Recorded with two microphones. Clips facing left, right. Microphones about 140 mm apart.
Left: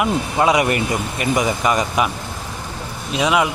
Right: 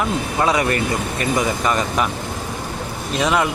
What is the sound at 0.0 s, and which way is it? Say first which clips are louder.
Speech: left 2 dB; 15° left (ahead or behind).